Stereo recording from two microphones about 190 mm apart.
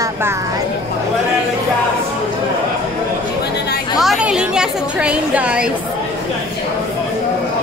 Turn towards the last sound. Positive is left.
turn(degrees=-5)  # may be behind; listen again after turning